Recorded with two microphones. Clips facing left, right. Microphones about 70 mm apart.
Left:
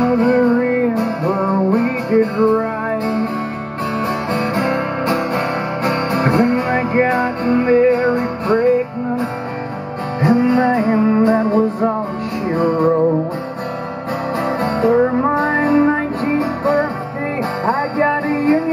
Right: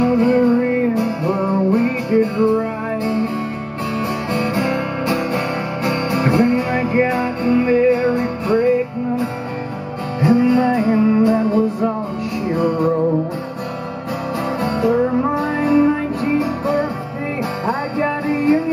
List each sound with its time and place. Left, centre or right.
0.0 s music: left
4.0 s music: left
10.2 s music: left
14.4 s music: left